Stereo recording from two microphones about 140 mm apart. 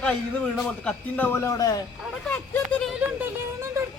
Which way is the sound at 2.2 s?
5° left (ahead or behind).